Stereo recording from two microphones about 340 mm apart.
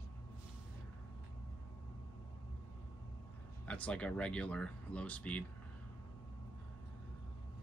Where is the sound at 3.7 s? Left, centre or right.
Centre.